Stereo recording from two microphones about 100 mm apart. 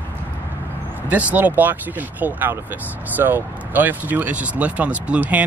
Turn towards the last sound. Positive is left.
turn(degrees=-15)  # may be behind; listen again after turning